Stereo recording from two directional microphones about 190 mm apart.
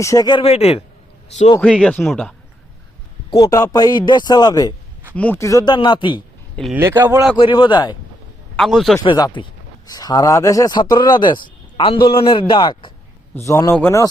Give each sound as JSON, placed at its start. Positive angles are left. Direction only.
{"t": 0.0, "sound": "speech", "side_deg": 20}
{"t": 1.7, "sound": "speech", "side_deg": 5}
{"t": 3.2, "sound": "speech", "side_deg": 20}
{"t": 5.1, "sound": "speech", "side_deg": 10}
{"t": 6.7, "sound": "speech", "side_deg": -15}
{"t": 7.3, "sound": "speech", "side_deg": 25}
{"t": 8.5, "sound": "speech", "side_deg": 0}
{"t": 9.0, "sound": "speech", "side_deg": 25}